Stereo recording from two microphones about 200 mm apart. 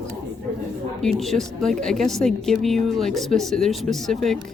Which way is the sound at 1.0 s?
Centre (ahead or behind).